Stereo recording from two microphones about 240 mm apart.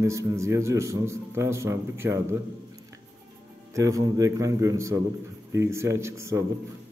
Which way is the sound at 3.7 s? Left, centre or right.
Centre.